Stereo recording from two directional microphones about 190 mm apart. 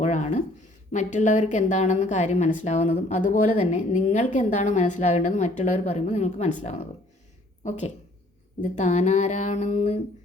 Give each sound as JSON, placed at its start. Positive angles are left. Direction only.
{"t": 0.0, "sound": "a sound", "side_deg": 40}
{"t": 0.9, "sound": "a woman's voice", "side_deg": 40}
{"t": 8.6, "sound": "a woman's voice", "side_deg": 35}